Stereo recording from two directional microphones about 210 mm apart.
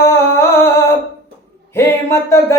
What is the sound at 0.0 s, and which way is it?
Humming, 10° left (ahead or behind).